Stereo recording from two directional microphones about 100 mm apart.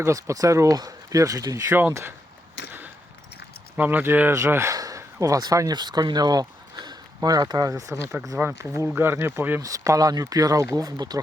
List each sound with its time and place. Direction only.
0.0 s speech: 30° right (ahead or behind)
1.7 s speech: 25° right (ahead or behind)
3.8 s speech: 15° right (ahead or behind)
4.7 s speech: 35° right (ahead or behind); by 9.6 s 20° right (ahead or behind)
9.6 s speech: 35° right (ahead or behind)